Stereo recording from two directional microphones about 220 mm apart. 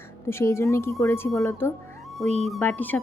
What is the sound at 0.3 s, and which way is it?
Speech, 10° left (ahead or behind).